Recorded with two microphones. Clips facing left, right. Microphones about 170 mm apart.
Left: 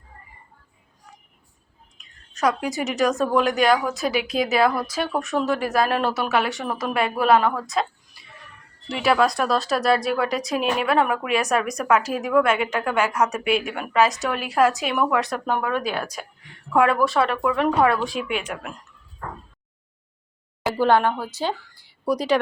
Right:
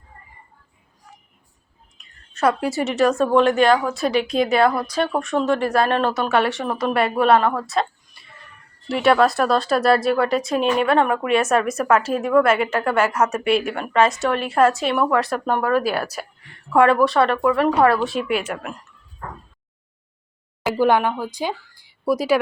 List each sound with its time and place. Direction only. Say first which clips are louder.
2.6 s a woman's voice: right 4 dB; 15° left (ahead or behind)
3.0 s speech: right 4 dB; centre (ahead or behind)
20.7 s speech: right 1 dB; 15° right (ahead or behind)